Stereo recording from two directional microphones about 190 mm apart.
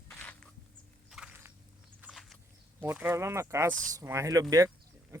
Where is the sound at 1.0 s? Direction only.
5° right (ahead or behind).